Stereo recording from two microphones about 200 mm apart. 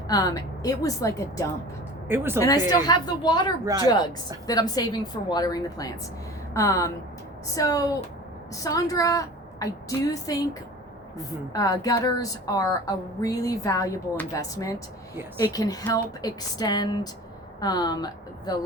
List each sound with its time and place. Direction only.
0.1 s a woman's voice: 20° left (ahead or behind)
2.0 s speech: 10° right (ahead or behind)
2.8 s a woman's voice: 20° left (ahead or behind)
11.5 s a woman's voice: 15° left (ahead or behind)